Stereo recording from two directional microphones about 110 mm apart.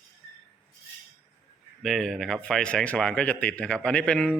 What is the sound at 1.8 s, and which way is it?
Speech, 5° left (ahead or behind).